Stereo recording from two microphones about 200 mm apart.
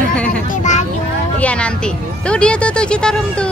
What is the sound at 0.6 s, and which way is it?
Speech, 35° left (ahead or behind).